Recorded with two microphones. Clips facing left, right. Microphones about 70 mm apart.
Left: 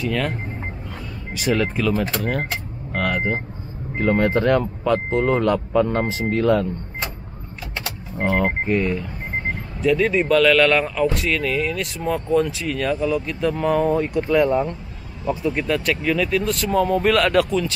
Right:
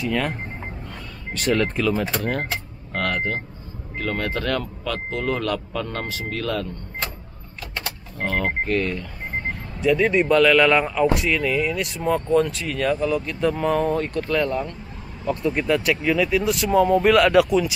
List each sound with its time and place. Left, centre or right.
0.0 s speech: centre; by 6.7 s left
8.2 s speech: centre
9.5 s speech: centre
15.2 s speech: centre